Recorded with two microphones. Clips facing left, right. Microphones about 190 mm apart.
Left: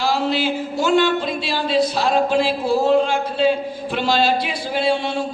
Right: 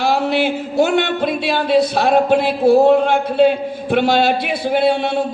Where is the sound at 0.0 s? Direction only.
60° right (ahead or behind).